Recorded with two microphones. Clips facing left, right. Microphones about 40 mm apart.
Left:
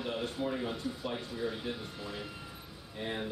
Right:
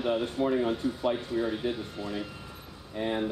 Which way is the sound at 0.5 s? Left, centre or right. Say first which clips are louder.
Right 8 dB; centre.